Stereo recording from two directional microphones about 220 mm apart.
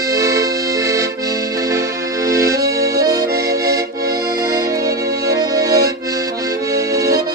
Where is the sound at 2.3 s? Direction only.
15° right (ahead or behind).